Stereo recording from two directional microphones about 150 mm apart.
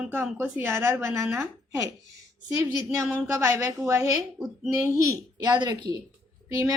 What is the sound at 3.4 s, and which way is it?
Speech, 20° right (ahead or behind).